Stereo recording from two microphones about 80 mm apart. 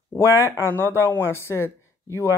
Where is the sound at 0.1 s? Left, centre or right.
Left.